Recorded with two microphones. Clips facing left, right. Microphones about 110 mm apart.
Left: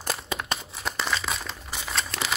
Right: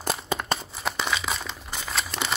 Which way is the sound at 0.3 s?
30° right (ahead or behind).